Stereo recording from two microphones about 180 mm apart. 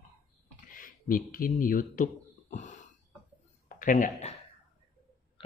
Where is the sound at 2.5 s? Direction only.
45° left (ahead or behind).